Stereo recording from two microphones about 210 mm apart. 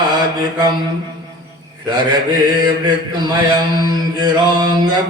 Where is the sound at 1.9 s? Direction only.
20° right (ahead or behind).